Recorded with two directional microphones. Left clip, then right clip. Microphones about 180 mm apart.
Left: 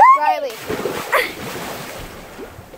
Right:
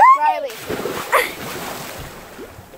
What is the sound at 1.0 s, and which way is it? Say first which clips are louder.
Boat: right 1 dB; 35° right (ahead or behind).